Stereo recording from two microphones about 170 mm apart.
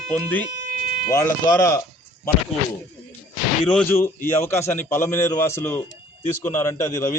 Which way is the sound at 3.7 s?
10° left (ahead or behind).